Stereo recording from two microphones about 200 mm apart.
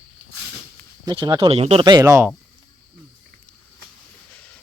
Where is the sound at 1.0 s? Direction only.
20° right (ahead or behind).